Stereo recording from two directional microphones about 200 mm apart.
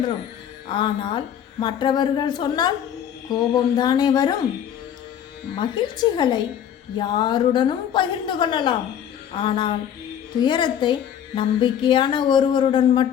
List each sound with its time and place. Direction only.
0.7 s a woman's voice: 25° left (ahead or behind)
5.5 s a woman's voice: 20° left (ahead or behind)